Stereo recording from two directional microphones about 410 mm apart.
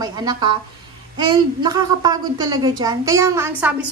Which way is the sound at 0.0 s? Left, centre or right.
Centre.